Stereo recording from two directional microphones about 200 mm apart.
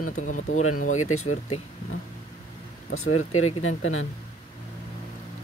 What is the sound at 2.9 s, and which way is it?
Speech, 90° left.